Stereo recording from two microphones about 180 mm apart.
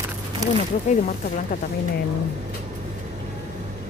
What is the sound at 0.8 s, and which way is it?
Speech, 40° left (ahead or behind).